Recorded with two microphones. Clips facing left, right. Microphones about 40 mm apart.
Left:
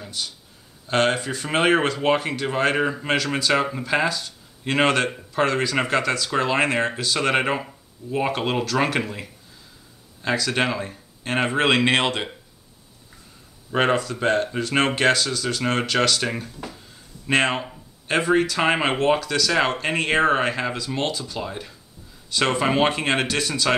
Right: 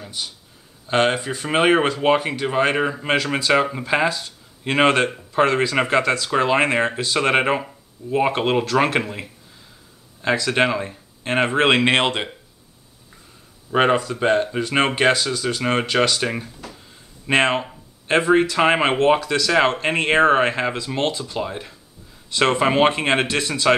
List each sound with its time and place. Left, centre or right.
0.0 s a sound: centre
0.8 s speech: centre
13.7 s speech: centre